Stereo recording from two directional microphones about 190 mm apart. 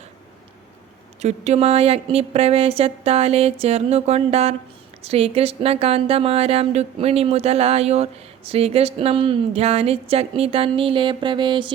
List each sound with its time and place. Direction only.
1.2 s speech: 35° right (ahead or behind)